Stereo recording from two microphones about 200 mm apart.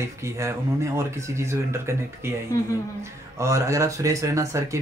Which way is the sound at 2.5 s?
15° left (ahead or behind).